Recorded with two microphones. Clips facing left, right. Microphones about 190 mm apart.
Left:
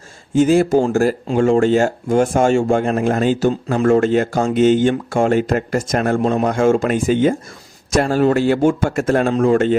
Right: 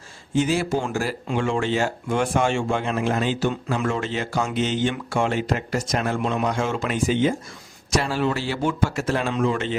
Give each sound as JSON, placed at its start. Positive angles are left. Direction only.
{"t": 0.3, "sound": "speech", "side_deg": 45}